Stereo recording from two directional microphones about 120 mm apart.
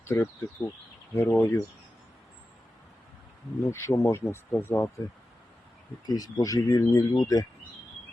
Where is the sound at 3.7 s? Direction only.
25° left (ahead or behind).